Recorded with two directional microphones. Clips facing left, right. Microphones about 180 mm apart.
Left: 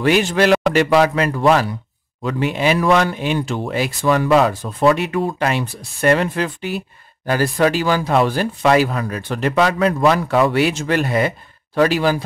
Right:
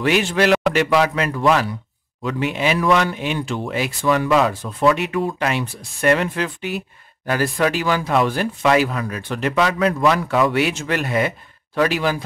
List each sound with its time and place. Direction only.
0.0 s speech: 40° left (ahead or behind)